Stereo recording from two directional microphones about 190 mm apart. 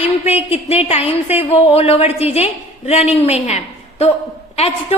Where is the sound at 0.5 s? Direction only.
35° left (ahead or behind).